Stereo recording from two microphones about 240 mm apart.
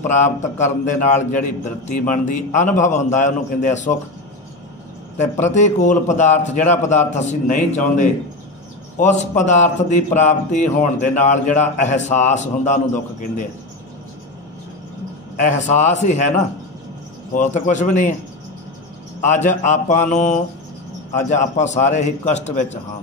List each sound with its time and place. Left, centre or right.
0.1 s a man's voice: left
5.1 s a man's voice: left
8.9 s a man's voice: left
15.4 s a man's voice: left
19.2 s a man's voice: left
21.4 s a man's voice: left